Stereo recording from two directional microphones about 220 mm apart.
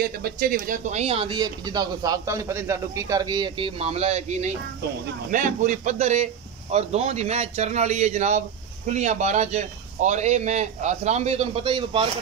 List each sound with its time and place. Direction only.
0.0 s a man's voice: 45° right (ahead or behind); by 12.1 s 25° right (ahead or behind)